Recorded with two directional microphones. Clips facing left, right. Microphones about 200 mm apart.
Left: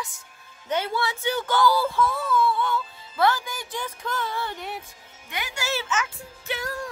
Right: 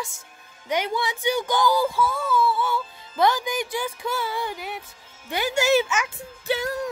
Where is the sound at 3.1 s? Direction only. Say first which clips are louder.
Right 2 dB; 15° right (ahead or behind).